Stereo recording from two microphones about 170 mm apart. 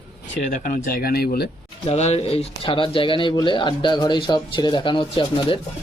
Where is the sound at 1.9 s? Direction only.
40° left (ahead or behind).